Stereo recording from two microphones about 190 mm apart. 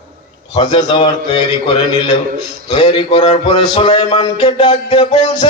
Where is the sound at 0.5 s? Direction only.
30° left (ahead or behind).